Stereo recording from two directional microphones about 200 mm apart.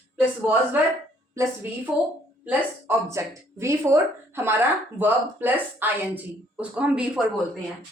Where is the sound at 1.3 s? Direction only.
15° right (ahead or behind).